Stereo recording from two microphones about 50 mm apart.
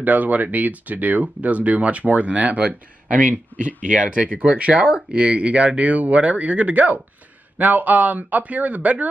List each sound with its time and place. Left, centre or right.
0.0 s speech: right